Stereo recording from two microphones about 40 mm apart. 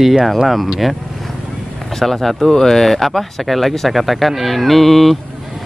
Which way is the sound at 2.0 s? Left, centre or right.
Centre.